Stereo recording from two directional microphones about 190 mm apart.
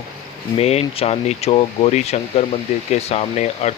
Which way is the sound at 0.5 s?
35° left (ahead or behind).